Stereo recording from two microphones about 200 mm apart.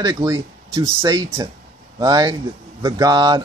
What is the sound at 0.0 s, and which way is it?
A man's voice, 20° right (ahead or behind).